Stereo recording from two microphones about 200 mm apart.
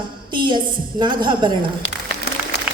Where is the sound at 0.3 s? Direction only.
20° right (ahead or behind).